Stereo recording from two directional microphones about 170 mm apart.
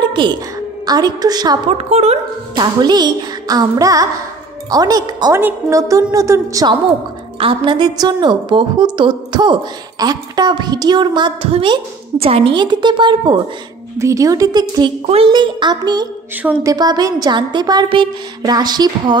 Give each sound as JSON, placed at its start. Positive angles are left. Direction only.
{"t": 0.1, "sound": "a woman's voice", "side_deg": -30}
{"t": 1.8, "sound": "a woman's voice", "side_deg": -40}
{"t": 2.5, "sound": "a woman's voice", "side_deg": -25}